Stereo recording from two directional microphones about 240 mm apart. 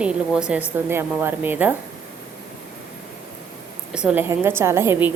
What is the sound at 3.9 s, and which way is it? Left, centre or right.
A woman's voice, centre.